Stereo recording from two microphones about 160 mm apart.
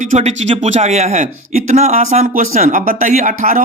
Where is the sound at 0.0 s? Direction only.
45° right (ahead or behind).